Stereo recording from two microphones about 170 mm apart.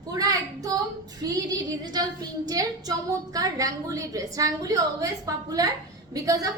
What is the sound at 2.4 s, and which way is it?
A woman's voice, 20° right (ahead or behind).